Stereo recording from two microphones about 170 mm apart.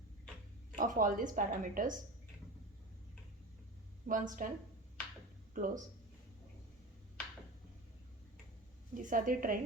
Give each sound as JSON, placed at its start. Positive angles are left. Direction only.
{"t": 0.8, "sound": "a woman's voice", "side_deg": -50}
{"t": 4.0, "sound": "a woman's voice", "side_deg": -50}
{"t": 5.5, "sound": "a woman's voice", "side_deg": -50}
{"t": 9.0, "sound": "a woman's voice", "side_deg": -50}